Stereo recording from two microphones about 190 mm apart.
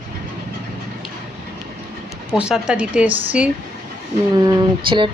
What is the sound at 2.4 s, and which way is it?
Speech, 5° right (ahead or behind).